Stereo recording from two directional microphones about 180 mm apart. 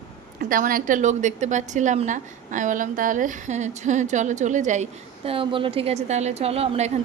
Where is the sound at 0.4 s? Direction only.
50° right (ahead or behind).